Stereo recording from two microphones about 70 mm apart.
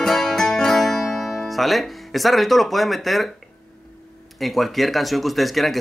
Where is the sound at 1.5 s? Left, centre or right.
Centre.